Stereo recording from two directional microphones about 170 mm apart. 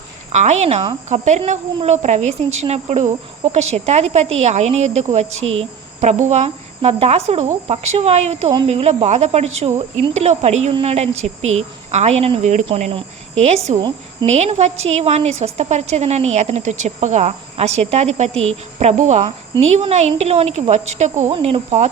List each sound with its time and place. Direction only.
0.3 s a woman's voice: 40° right (ahead or behind)
6.0 s a woman's voice: 45° right (ahead or behind)
12.6 s a woman's voice: 35° right (ahead or behind)